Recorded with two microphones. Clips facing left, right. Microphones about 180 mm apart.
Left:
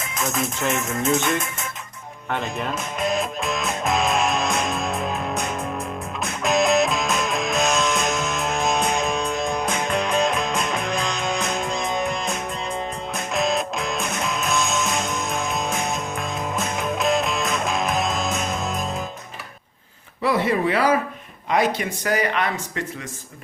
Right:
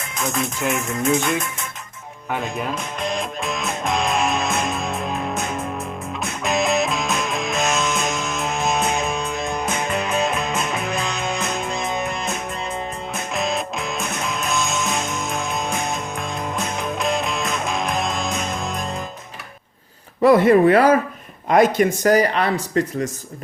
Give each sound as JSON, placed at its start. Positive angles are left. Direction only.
{"t": 0.1, "sound": "music", "side_deg": 0}
{"t": 13.3, "sound": "music", "side_deg": 0}
{"t": 20.2, "sound": "speech", "side_deg": -50}